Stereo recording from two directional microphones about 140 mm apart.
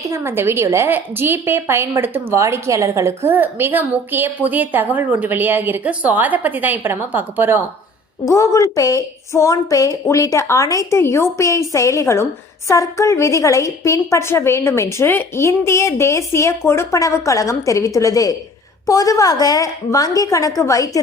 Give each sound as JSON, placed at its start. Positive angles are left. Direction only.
{"t": 0.1, "sound": "a woman's voice", "side_deg": -15}
{"t": 8.3, "sound": "a woman's voice", "side_deg": 20}